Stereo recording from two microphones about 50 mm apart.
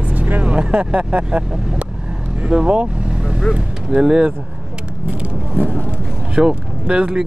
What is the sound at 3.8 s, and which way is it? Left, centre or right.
Speech, centre.